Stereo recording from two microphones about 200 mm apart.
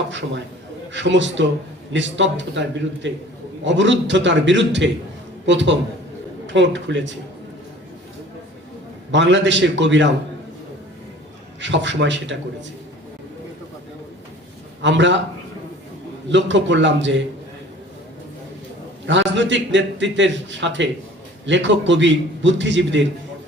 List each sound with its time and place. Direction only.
0.1 s a man's voice: 65° right (ahead or behind)
9.1 s a man's voice: 65° right (ahead or behind)
11.6 s a man's voice: 65° right (ahead or behind)
14.8 s a man's voice: 65° right (ahead or behind)
16.3 s a man's voice: 65° right (ahead or behind)
19.0 s a man's voice: 65° right (ahead or behind)